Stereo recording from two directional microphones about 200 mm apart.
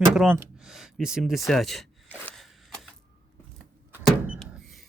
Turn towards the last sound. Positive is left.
turn(degrees=0)  # may be behind; listen again after turning